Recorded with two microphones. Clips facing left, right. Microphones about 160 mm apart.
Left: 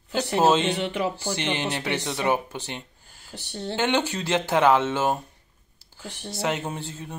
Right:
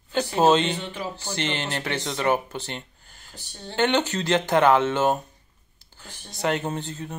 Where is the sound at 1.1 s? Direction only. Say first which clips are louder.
Left 1 dB; 10° left (ahead or behind).